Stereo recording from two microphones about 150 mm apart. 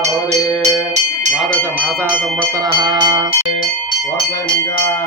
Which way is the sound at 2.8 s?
30° right (ahead or behind).